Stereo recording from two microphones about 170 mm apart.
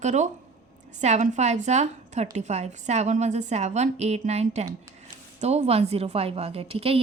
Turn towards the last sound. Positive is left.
turn(degrees=-35)  # may be behind; listen again after turning